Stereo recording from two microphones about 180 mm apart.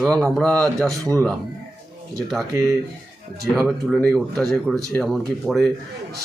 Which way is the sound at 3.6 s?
Centre (ahead or behind).